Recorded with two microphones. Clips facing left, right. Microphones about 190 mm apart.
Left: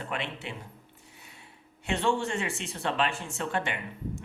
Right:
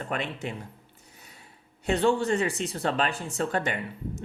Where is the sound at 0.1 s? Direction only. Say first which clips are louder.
Right 5 dB; 45° right (ahead or behind).